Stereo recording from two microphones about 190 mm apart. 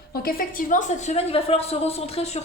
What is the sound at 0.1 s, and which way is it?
A woman's voice, 50° left (ahead or behind).